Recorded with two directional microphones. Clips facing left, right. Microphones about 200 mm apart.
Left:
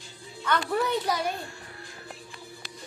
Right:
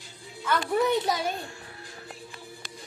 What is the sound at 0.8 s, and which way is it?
Speech, 25° right (ahead or behind).